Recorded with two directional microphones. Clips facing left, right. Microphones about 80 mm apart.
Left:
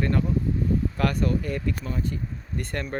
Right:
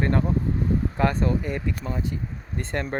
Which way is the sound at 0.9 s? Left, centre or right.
Right.